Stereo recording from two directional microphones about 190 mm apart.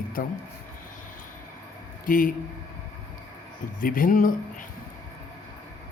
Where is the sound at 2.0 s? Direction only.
45° left (ahead or behind).